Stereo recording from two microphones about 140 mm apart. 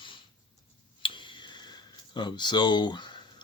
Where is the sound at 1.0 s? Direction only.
35° left (ahead or behind).